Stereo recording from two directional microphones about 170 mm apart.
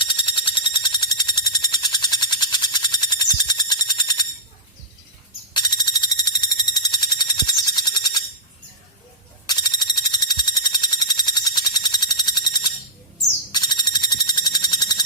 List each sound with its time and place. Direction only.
0.0 s frog: 30° left (ahead or behind)
5.5 s alarm: 25° left (ahead or behind)
9.5 s a sound: 25° left (ahead or behind)